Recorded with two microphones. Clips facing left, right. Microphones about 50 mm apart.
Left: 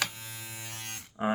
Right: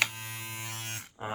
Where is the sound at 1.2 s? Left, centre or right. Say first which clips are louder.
Left 8 dB; left.